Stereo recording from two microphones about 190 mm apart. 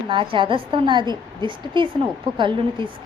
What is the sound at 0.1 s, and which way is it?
A woman's voice, 25° right (ahead or behind).